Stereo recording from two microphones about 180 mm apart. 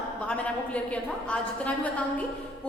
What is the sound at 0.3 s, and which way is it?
A woman's voice, 5° left (ahead or behind).